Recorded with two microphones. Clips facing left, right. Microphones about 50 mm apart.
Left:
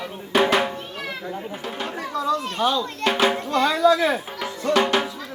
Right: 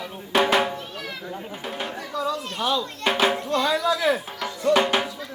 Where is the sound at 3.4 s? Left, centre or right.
Left.